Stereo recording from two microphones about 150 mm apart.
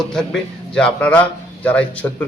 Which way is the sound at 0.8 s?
10° left (ahead or behind).